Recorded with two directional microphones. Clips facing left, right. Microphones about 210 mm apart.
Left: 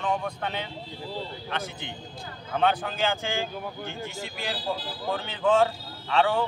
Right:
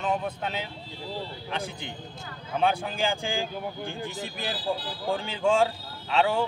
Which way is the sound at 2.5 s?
10° right (ahead or behind).